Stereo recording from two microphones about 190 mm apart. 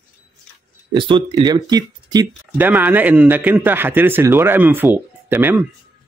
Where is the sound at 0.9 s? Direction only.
25° right (ahead or behind).